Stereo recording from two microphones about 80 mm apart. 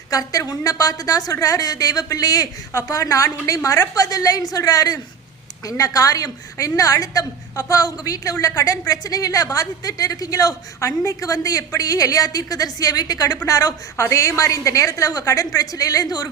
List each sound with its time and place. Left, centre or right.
0.1 s a woman's voice: left